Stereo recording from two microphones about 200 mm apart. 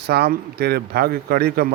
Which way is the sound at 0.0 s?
55° right (ahead or behind).